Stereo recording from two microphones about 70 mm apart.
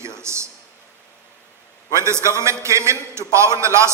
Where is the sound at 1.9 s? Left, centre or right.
Right.